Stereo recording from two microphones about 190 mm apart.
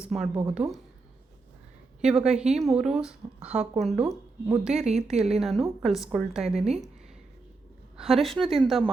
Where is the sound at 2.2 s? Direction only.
5° right (ahead or behind).